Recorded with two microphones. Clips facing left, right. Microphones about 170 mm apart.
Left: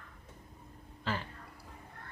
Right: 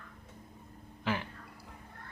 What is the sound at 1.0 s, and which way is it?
Speech, 15° right (ahead or behind).